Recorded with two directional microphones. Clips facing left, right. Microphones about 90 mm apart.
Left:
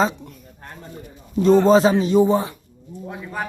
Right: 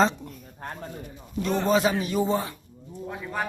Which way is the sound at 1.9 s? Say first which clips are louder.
Left 8 dB; 20° left (ahead or behind).